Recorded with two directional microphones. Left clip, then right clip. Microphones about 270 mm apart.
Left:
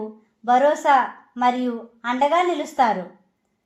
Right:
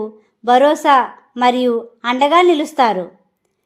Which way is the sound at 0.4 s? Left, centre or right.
Right.